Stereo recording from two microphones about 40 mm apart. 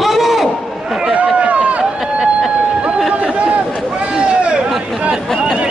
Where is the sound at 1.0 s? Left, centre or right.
Right.